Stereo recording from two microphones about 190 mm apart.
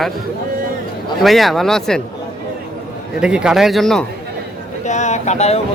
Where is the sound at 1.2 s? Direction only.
Centre (ahead or behind).